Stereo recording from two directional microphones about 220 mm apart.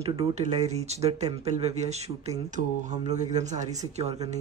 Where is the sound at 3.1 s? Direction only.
30° right (ahead or behind).